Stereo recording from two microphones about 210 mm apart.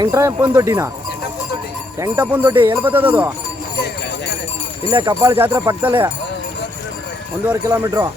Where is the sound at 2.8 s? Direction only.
10° right (ahead or behind).